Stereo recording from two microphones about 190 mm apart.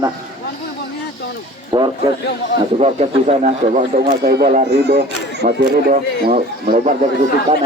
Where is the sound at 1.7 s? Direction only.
25° right (ahead or behind).